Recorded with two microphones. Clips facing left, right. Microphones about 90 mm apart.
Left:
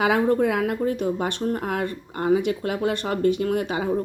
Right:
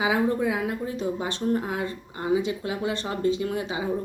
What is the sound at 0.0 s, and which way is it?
A woman's voice, 55° left (ahead or behind).